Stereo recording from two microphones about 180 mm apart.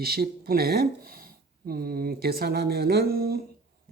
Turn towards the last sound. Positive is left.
turn(degrees=-60)  # may be behind; listen again after turning